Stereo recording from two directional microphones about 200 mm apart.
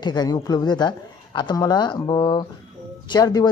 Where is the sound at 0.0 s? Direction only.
20° left (ahead or behind).